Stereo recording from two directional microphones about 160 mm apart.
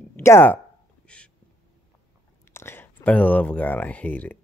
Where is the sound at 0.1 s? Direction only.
15° left (ahead or behind).